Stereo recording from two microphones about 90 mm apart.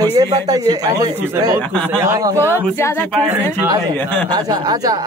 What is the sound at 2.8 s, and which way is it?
Speech, 30° left (ahead or behind).